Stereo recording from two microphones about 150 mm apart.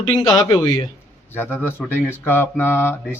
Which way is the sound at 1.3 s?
15° left (ahead or behind).